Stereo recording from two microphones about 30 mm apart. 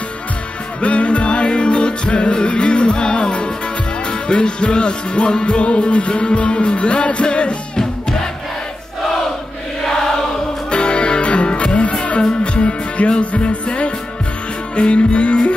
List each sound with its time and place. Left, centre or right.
0.7 s music: left
10.7 s music: left
12.2 s music: left